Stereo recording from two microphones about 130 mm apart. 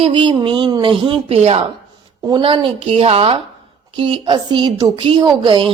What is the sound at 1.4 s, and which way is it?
Speech, 50° right (ahead or behind).